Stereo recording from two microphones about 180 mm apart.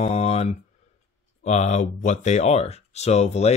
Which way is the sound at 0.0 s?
35° left (ahead or behind).